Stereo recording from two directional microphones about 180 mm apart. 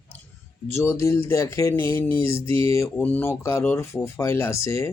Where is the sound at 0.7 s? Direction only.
15° left (ahead or behind).